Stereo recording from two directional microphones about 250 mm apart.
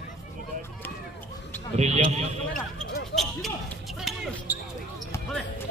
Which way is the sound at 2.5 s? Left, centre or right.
Left.